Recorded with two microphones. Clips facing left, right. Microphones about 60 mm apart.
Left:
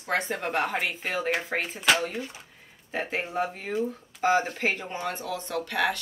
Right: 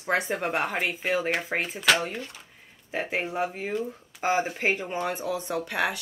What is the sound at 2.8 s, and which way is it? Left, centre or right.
Speech, centre.